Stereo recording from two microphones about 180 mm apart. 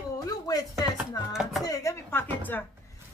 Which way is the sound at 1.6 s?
20° left (ahead or behind).